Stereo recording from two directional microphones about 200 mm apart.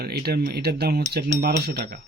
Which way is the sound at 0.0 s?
50° right (ahead or behind).